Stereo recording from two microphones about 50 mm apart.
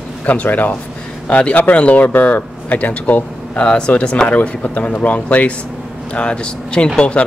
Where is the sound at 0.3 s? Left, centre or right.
Left.